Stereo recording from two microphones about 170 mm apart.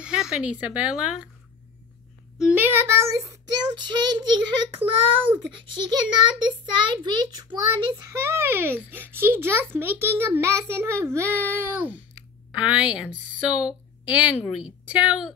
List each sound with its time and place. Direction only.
0.0 s a child's voice: 5° right (ahead or behind)
2.3 s a child's voice: 5° right (ahead or behind)